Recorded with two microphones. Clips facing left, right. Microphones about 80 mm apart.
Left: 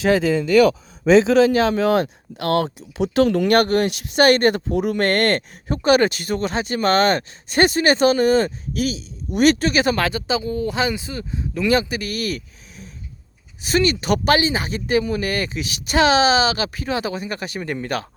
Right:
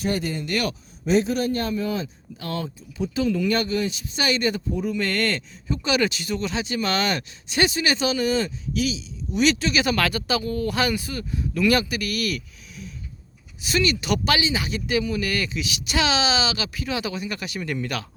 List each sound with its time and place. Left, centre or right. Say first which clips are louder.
1.1 s speech: left 8 dB; left